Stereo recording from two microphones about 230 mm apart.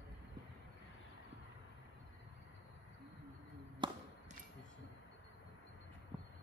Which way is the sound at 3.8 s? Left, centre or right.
Centre.